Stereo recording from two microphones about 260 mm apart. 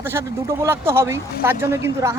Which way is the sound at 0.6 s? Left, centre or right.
Centre.